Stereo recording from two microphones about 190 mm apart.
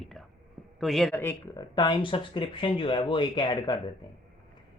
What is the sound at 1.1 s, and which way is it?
Speech, 15° left (ahead or behind).